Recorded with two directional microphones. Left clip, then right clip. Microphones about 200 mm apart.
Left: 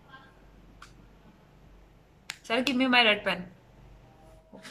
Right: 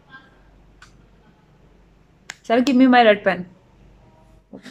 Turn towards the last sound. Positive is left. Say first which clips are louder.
# right 9 dB
turn(degrees=-30)  # may be behind; listen again after turning